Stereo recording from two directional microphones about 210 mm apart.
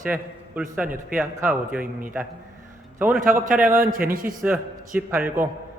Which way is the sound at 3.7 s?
45° right (ahead or behind).